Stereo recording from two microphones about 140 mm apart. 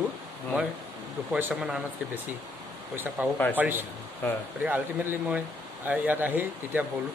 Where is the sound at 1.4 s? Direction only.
10° right (ahead or behind).